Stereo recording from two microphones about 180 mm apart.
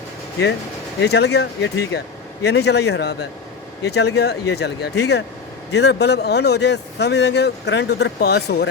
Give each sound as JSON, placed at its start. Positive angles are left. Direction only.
{"t": 0.9, "sound": "a man's voice", "side_deg": 65}